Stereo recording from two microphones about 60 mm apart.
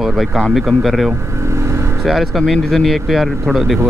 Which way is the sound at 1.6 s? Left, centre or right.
Right.